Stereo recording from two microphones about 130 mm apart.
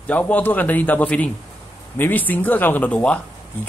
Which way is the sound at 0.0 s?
10° left (ahead or behind).